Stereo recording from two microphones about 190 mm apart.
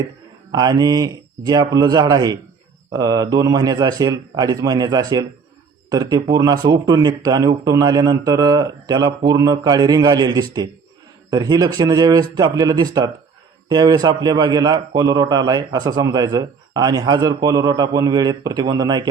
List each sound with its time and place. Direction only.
0.5 s a man's voice: 20° right (ahead or behind)